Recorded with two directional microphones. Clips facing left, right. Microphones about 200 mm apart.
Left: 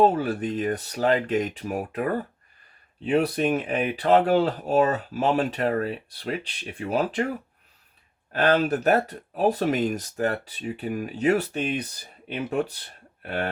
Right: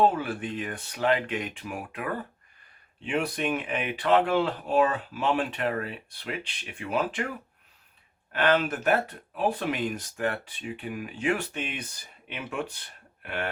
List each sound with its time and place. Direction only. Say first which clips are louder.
0.0 s speech: left 4 dB; 40° left (ahead or behind)
8.3 s speech: left 3 dB; 35° left (ahead or behind)